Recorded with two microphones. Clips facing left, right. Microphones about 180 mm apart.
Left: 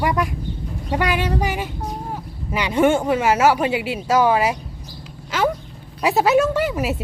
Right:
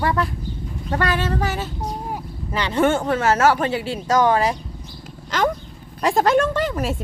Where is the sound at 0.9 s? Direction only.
10° left (ahead or behind).